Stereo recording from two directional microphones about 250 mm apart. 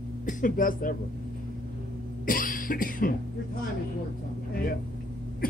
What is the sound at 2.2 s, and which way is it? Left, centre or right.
Cough, left.